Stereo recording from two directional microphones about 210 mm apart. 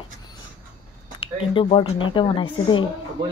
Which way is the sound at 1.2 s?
25° left (ahead or behind).